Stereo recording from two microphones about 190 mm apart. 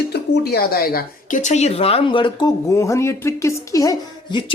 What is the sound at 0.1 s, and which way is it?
Speech, 55° left (ahead or behind).